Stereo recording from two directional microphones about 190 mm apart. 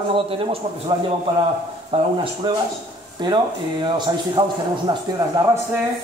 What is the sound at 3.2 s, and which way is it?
A man's voice, 25° right (ahead or behind).